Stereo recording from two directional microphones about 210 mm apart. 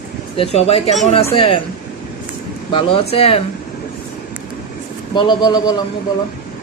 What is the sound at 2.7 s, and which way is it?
Speech, 25° left (ahead or behind).